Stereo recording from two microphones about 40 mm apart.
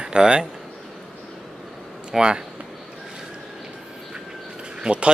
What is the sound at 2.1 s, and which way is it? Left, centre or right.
Speech, right.